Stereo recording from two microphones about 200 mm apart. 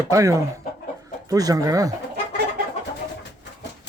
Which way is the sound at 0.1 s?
15° right (ahead or behind).